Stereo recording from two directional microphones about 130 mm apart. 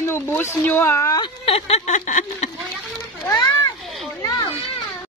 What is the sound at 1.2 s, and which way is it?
Speech, 50° left (ahead or behind).